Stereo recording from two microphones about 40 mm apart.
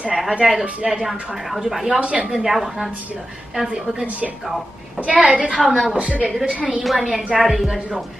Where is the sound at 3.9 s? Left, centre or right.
Right.